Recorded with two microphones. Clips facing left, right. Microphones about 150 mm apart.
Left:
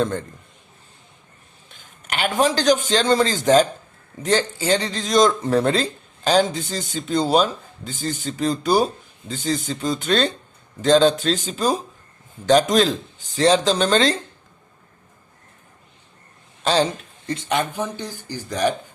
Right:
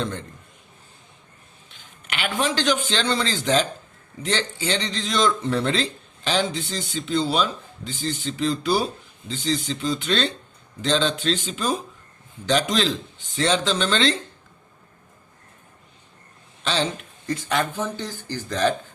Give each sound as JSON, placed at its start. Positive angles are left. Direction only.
{"t": 1.7, "sound": "speech", "side_deg": 45}
{"t": 16.6, "sound": "speech", "side_deg": 40}
{"t": 17.2, "sound": "speech", "side_deg": 20}